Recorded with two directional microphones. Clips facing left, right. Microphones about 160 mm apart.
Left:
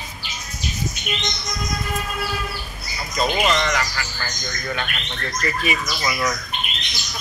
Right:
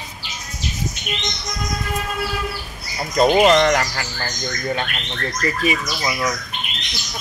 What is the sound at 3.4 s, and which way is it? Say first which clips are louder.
Speech: right 7 dB; 45° right (ahead or behind).